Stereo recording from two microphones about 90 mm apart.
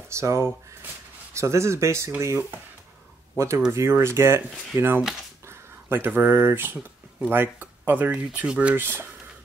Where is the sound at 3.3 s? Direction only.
35° right (ahead or behind).